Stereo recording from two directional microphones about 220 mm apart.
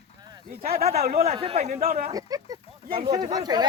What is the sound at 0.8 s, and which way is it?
Speech, 30° right (ahead or behind).